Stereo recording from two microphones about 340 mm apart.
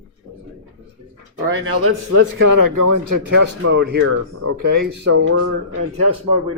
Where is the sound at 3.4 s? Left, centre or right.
Right.